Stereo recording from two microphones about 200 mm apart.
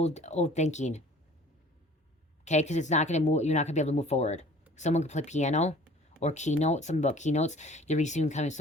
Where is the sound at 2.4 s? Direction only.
35° left (ahead or behind).